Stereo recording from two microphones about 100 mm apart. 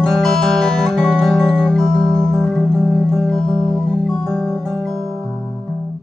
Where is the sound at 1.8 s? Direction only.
40° right (ahead or behind).